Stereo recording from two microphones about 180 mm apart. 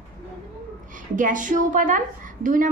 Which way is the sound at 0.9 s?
45° right (ahead or behind).